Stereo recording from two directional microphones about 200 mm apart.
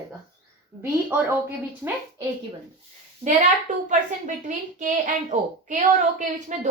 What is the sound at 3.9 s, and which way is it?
Speech, 40° right (ahead or behind).